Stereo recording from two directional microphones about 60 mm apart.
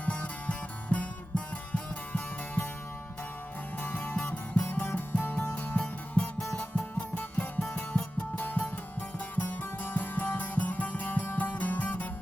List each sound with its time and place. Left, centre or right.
0.0 s music: left
3.8 s music: left
7.6 s music: centre
8.4 s music: left